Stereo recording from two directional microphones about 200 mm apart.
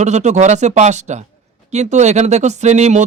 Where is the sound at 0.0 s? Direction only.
35° right (ahead or behind).